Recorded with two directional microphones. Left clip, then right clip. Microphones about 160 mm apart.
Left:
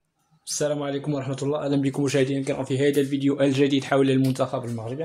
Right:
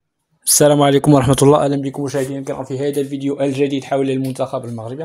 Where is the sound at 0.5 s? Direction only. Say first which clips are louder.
Right 14 dB; 65° right (ahead or behind); by 1.6 s 80° right.